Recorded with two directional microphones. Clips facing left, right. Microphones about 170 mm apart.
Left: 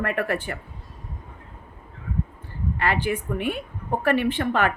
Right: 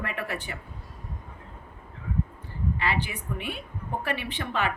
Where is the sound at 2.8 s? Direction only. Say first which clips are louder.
Left 8 dB; 50° left (ahead or behind).